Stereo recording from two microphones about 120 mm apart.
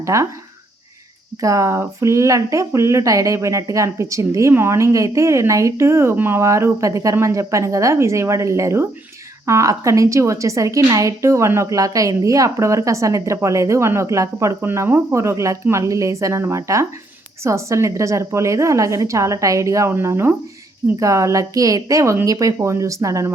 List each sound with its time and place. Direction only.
0.0 s speech: 25° right (ahead or behind)
1.4 s speech: 25° right (ahead or behind)